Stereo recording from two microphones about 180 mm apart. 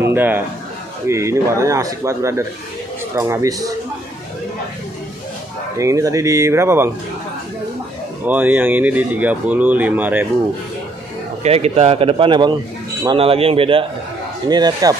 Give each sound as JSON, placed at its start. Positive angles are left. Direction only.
{"t": 0.0, "sound": "a man's voice", "side_deg": -10}
{"t": 5.8, "sound": "speech", "side_deg": -15}
{"t": 8.3, "sound": "speech", "side_deg": -10}
{"t": 11.4, "sound": "a man's voice", "side_deg": -35}